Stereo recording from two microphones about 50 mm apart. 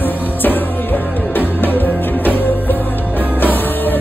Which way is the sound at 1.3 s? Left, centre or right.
Left.